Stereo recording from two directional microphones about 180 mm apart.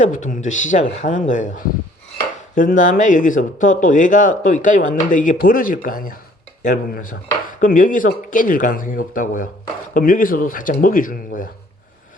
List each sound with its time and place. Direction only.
0.0 s speech: 45° left (ahead or behind)